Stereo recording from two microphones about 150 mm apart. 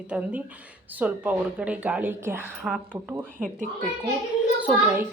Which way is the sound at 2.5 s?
Centre (ahead or behind).